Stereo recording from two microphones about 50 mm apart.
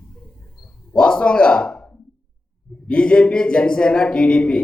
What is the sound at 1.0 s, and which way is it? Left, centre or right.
Speech, centre.